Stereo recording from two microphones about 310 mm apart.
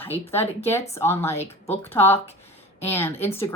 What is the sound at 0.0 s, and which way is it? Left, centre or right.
A woman's voice, centre.